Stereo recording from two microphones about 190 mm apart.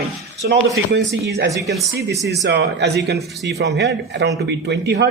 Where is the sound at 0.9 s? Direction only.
60° right (ahead or behind).